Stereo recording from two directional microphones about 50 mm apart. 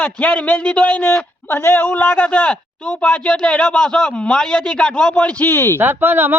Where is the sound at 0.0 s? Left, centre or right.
Left.